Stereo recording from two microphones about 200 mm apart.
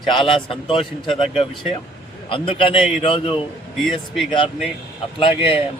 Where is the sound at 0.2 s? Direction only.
25° left (ahead or behind).